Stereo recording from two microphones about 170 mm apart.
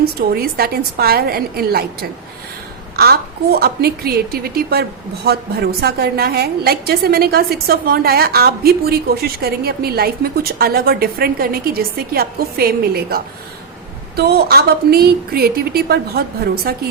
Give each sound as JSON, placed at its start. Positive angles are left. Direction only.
{"t": 0.2, "sound": "a woman's voice", "side_deg": -65}